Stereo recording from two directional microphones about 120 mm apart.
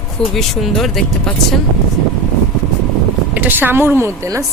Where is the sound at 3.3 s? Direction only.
15° right (ahead or behind).